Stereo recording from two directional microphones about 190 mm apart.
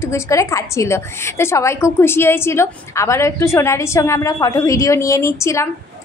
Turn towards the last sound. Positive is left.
turn(degrees=15)  # may be behind; listen again after turning